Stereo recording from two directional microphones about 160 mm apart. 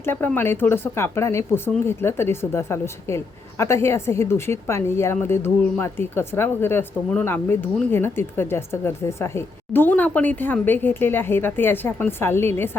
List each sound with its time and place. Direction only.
0.0 s a woman's voice: 15° left (ahead or behind)